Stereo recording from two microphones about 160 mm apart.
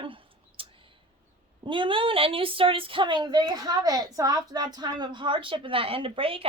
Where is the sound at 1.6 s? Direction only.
30° right (ahead or behind).